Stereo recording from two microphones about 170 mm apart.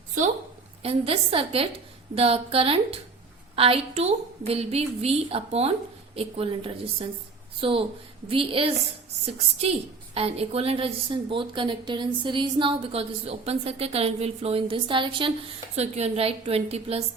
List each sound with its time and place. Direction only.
0.8 s a woman's voice: 35° right (ahead or behind)